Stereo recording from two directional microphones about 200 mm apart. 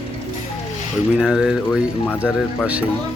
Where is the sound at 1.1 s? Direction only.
5° right (ahead or behind).